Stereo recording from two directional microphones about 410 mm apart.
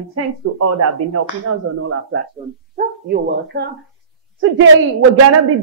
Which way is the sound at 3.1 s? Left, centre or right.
Right.